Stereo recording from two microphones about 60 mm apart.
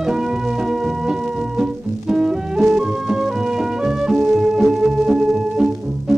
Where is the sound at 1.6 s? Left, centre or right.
Centre.